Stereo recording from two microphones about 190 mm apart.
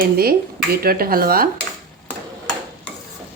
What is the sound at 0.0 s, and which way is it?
Speech, 50° right (ahead or behind).